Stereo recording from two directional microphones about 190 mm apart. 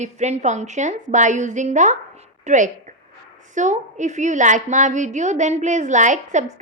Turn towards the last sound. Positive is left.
turn(degrees=-40)  # may be behind; listen again after turning